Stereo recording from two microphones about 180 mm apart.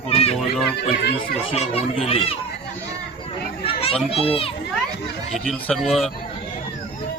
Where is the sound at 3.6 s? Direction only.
30° left (ahead or behind).